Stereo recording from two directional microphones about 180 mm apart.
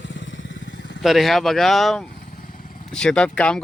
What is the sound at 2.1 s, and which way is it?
Motorcycle, 55° left (ahead or behind).